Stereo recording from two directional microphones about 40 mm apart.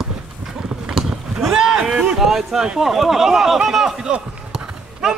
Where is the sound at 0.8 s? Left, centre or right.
Centre.